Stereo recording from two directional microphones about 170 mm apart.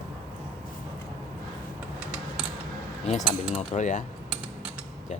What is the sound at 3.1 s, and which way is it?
Speech, 40° left (ahead or behind).